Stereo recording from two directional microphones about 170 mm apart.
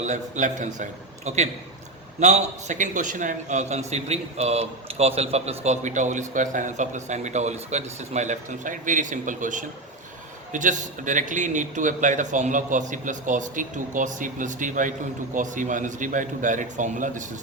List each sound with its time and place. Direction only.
0.0 s a man's voice: 45° right (ahead or behind)